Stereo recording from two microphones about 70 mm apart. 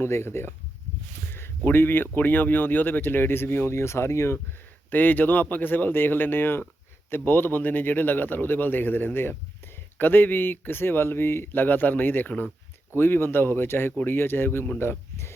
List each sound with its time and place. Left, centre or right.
0.0 s speech: left
1.3 s a sound: left
2.1 s speech: left
4.9 s speech: left